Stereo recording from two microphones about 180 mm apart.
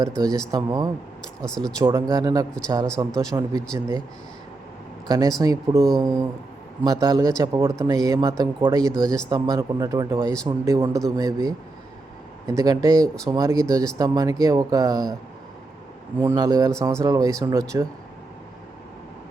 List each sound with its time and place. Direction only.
0.2 s a man's voice: 20° right (ahead or behind)
1.5 s speech: 5° left (ahead or behind)
1.8 s a man's voice: 25° right (ahead or behind)
5.0 s a man's voice: 20° right (ahead or behind)
16.2 s a man's voice: 20° right (ahead or behind)